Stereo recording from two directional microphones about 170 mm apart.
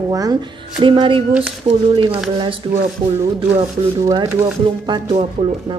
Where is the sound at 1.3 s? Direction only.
5° right (ahead or behind).